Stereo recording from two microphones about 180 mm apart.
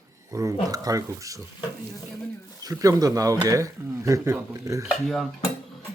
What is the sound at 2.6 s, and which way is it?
Speech, 20° right (ahead or behind).